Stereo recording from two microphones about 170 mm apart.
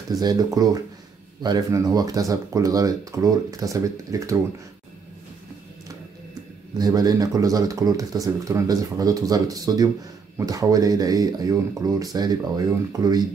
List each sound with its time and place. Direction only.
0.1 s speech: 20° right (ahead or behind)
6.8 s speech: 20° right (ahead or behind)